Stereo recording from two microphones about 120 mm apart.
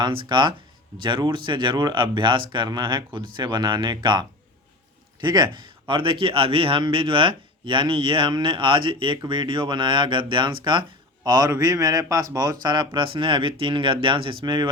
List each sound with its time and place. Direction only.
0.0 s speech: 40° right (ahead or behind)